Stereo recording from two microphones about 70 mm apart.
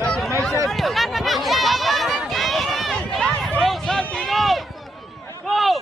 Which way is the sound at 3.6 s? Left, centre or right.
Centre.